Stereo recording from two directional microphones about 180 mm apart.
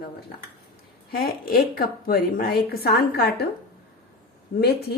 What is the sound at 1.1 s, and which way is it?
A woman's voice, 55° left (ahead or behind).